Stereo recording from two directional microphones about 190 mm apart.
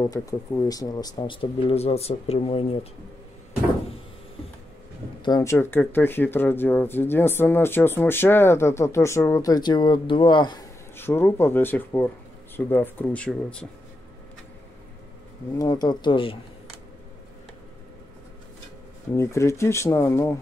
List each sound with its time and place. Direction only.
0.0 s speech: 15° left (ahead or behind)
5.2 s speech: 15° left (ahead or behind)
11.0 s speech: 10° left (ahead or behind)
15.5 s speech: 20° left (ahead or behind)
19.1 s speech: 15° left (ahead or behind)